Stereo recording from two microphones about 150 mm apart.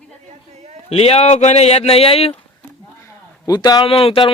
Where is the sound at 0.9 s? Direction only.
40° left (ahead or behind).